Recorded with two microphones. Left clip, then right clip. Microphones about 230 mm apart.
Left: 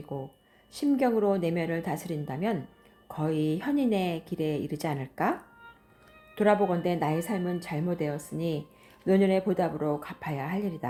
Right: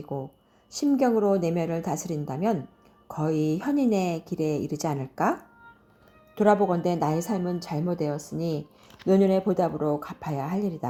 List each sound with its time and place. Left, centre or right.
0.1 s speech: right